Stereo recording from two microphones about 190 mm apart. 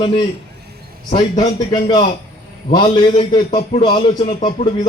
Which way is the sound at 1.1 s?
25° left (ahead or behind).